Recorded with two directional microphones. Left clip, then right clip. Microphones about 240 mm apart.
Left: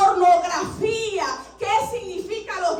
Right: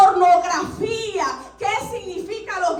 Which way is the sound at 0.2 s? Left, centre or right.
Centre.